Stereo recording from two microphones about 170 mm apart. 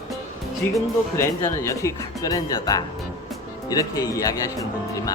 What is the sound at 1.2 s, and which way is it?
Speech, 15° left (ahead or behind).